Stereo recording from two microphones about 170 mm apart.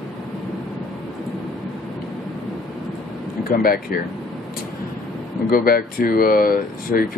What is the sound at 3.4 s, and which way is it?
Speech, 60° left (ahead or behind).